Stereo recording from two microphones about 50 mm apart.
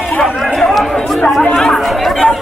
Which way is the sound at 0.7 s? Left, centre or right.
Centre.